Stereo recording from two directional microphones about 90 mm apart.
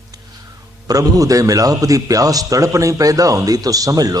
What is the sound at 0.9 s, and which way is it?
A man's voice, 40° right (ahead or behind).